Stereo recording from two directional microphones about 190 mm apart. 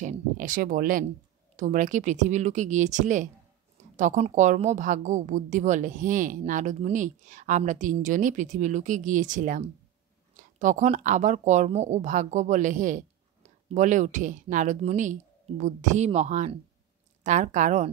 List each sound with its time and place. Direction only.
0.0 s speech: 40° right (ahead or behind)